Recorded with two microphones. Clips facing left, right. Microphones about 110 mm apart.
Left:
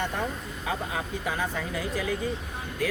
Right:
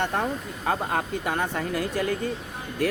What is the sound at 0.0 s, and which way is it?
Speech, 55° right (ahead or behind).